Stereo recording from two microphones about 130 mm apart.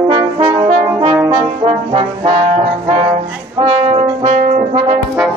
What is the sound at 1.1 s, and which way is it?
Brass instrument, 20° right (ahead or behind).